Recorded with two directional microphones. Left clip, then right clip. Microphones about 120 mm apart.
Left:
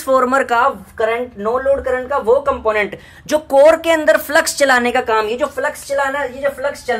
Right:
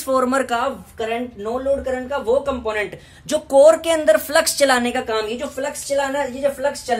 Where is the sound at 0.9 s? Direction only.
30° right (ahead or behind).